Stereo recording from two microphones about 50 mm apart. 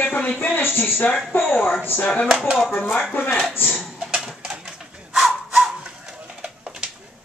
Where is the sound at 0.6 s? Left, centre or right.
Left.